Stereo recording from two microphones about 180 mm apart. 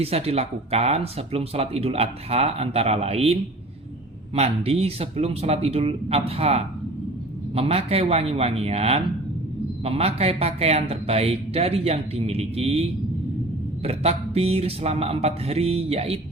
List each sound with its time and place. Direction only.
0.0 s speech: 35° right (ahead or behind)
4.4 s speech: 35° right (ahead or behind)